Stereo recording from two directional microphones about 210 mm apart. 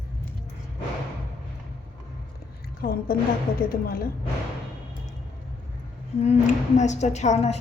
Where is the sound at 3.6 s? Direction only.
45° left (ahead or behind).